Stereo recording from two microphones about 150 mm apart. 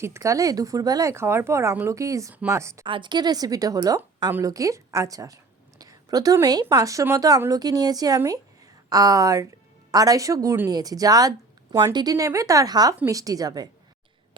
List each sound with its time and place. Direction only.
0.0 s a woman's voice: 20° right (ahead or behind)
2.8 s a woman's voice: 30° right (ahead or behind)